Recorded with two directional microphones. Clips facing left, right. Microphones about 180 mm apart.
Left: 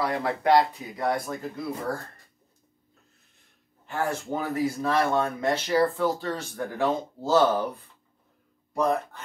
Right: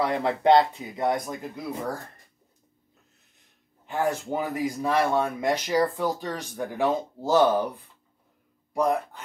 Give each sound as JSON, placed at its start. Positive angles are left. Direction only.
{"t": 0.0, "sound": "speech", "side_deg": -20}
{"t": 3.8, "sound": "speech", "side_deg": -15}